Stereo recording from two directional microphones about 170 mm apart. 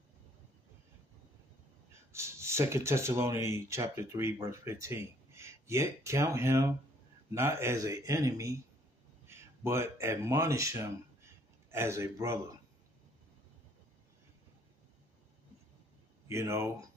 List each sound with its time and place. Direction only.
1.9 s a man's voice: 15° right (ahead or behind)
16.3 s a man's voice: 15° right (ahead or behind)